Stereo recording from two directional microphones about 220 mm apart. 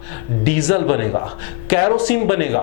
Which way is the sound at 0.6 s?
25° left (ahead or behind).